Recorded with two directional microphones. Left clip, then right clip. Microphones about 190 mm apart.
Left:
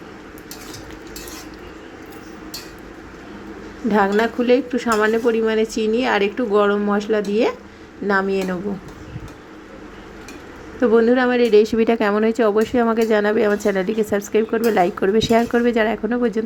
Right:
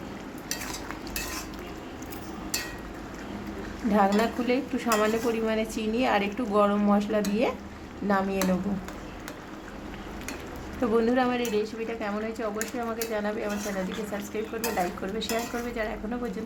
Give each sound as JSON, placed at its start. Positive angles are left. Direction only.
{"t": 3.9, "sound": "speech", "side_deg": 15}
{"t": 10.8, "sound": "speech", "side_deg": 15}
{"t": 11.5, "sound": "speech", "side_deg": 40}